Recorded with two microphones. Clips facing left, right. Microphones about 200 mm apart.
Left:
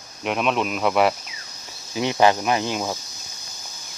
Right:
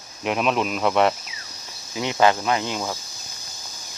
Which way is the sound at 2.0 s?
20° left (ahead or behind).